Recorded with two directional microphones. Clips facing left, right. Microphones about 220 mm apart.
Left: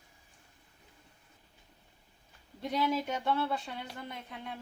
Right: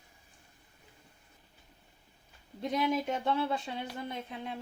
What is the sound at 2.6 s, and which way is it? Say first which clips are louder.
Speech: right 1 dB; 20° right (ahead or behind).